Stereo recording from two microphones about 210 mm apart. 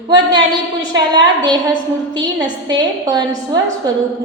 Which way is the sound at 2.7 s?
20° right (ahead or behind).